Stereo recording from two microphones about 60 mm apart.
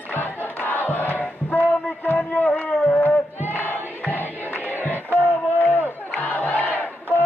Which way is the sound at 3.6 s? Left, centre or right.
Left.